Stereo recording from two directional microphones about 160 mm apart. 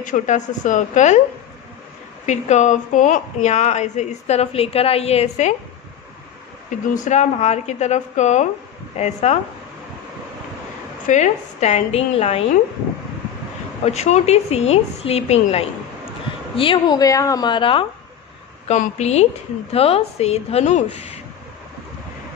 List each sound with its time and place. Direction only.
0.0 s a woman's voice: 50° left (ahead or behind)
2.2 s a woman's voice: 45° left (ahead or behind)
7.0 s a woman's voice: 45° left (ahead or behind)
11.1 s a woman's voice: 50° left (ahead or behind)
13.8 s a woman's voice: 45° left (ahead or behind)
18.7 s a woman's voice: 45° left (ahead or behind)